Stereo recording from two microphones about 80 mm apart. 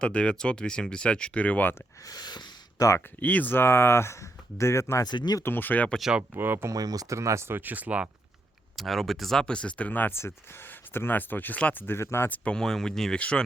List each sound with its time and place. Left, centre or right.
0.0 s speech: centre
2.0 s a sound: left
3.2 s speech: left
5.0 s speech: left
5.4 s speech: left
6.0 s speech: centre
6.3 s speech: right
6.7 s speech: right; by 8.1 s centre
8.7 s speech: centre; by 12.3 s left
12.3 s speech: centre